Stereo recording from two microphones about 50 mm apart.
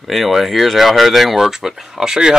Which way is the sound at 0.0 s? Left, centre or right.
Centre.